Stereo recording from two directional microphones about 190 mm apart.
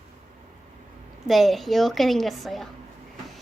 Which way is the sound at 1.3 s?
Centre (ahead or behind).